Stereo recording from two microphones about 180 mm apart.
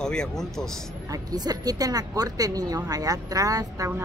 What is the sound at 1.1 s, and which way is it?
Speech, 20° right (ahead or behind).